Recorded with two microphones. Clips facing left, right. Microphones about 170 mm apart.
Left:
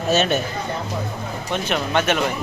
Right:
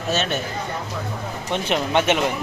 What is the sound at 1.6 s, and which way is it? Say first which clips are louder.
Speech: right 1 dB; 25° right (ahead or behind).